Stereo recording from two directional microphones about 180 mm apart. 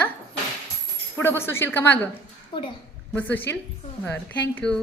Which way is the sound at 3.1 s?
10° left (ahead or behind).